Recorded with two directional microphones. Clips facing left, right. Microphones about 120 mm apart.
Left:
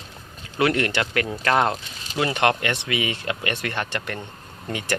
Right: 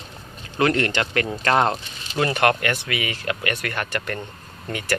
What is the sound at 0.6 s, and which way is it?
Speech, 15° left (ahead or behind).